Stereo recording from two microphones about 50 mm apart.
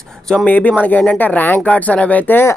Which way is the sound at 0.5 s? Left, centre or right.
Left.